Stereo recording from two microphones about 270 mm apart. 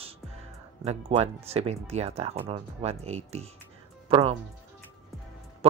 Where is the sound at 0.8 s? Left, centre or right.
Right.